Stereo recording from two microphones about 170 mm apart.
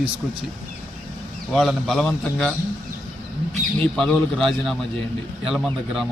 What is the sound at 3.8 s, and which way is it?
Speech, 5° left (ahead or behind).